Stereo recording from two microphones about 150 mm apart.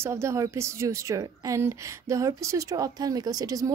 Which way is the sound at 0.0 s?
20° right (ahead or behind).